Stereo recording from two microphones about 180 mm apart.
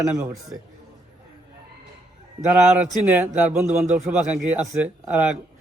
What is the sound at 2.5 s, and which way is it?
A man's voice, 10° right (ahead or behind).